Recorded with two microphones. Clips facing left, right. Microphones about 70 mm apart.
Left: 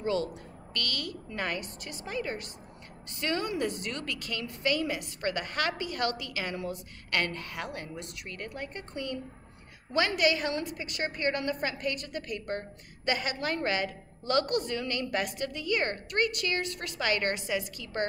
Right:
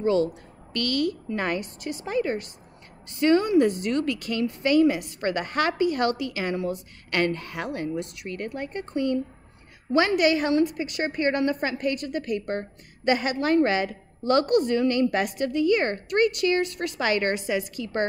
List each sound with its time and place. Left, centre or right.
0.0 s a woman's voice: right